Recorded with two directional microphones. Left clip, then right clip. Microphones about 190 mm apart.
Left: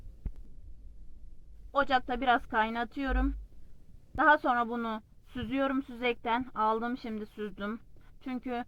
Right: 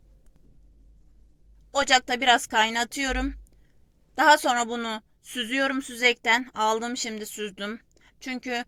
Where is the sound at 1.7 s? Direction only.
20° right (ahead or behind).